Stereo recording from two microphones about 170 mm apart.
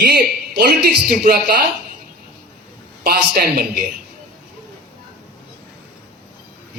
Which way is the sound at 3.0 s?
60° right (ahead or behind).